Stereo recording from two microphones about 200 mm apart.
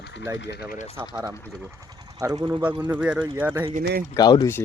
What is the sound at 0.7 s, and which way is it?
Speech, 35° left (ahead or behind).